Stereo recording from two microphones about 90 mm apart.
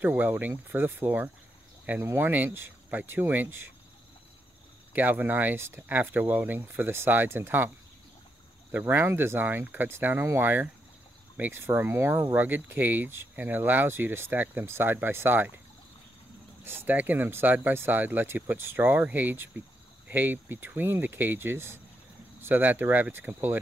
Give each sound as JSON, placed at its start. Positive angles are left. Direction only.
{"t": 0.0, "sound": "speech", "side_deg": -20}
{"t": 4.9, "sound": "speech", "side_deg": -20}
{"t": 8.7, "sound": "speech", "side_deg": -25}
{"t": 16.6, "sound": "speech", "side_deg": -25}